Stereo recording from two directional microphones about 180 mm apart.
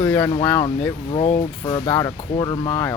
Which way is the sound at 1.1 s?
35° left (ahead or behind).